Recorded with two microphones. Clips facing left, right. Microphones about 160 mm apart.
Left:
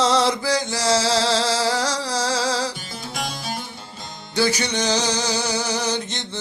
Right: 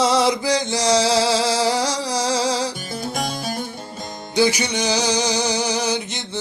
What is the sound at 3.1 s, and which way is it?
Music, 45° right (ahead or behind).